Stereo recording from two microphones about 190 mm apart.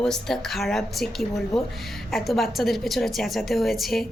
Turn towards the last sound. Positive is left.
turn(degrees=0)  # may be behind; listen again after turning